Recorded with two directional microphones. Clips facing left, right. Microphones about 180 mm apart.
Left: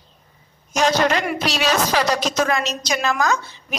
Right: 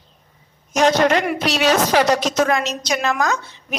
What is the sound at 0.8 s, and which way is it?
A woman's voice, 50° right (ahead or behind).